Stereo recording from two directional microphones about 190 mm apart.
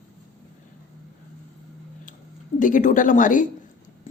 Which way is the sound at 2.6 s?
45° left (ahead or behind).